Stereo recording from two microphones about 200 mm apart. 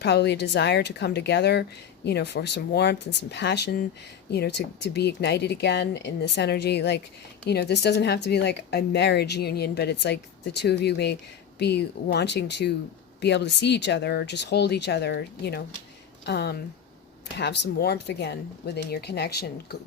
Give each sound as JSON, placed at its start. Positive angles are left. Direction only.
{"t": 0.0, "sound": "a woman's voice", "side_deg": 60}